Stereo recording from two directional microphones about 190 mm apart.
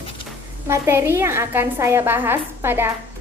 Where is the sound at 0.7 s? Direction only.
15° right (ahead or behind).